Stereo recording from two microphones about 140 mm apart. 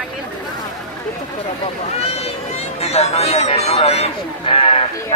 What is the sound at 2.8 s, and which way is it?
Speech, 50° left (ahead or behind).